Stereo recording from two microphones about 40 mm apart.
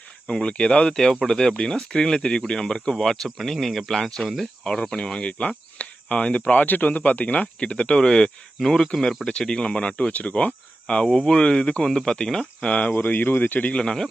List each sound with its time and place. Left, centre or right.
0.4 s speech: left
1.3 s speech: centre
4.6 s speech: centre; by 7.4 s left
7.6 s speech: left
8.5 s speech: centre
12.6 s speech: left
13.1 s speech: left
13.8 s speech: centre